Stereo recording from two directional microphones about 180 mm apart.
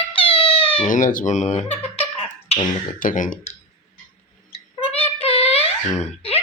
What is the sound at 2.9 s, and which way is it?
Speech, 50° left (ahead or behind).